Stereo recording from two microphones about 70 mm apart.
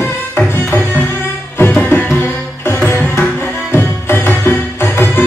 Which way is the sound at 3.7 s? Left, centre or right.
Left.